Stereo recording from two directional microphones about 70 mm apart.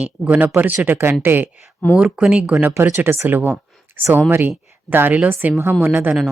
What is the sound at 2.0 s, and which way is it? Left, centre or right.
Speech, centre.